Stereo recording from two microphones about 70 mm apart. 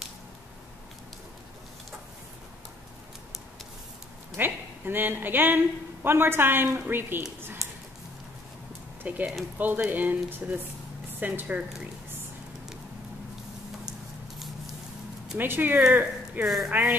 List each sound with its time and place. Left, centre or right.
4.4 s a woman's voice: right
9.0 s a woman's voice: right
15.3 s a woman's voice: right
16.4 s speech: centre